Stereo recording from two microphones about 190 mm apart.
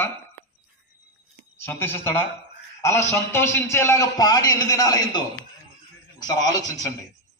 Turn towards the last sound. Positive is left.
turn(degrees=20)  # may be behind; listen again after turning